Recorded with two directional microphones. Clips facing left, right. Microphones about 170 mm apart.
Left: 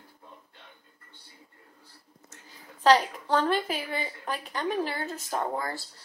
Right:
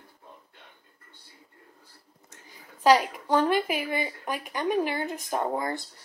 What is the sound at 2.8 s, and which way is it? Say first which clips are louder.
A woman's voice: right 1 dB; 10° right (ahead or behind).